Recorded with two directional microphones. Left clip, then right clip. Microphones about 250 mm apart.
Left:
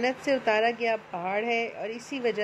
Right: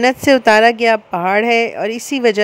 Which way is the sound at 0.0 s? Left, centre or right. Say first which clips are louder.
Right 14 dB; right.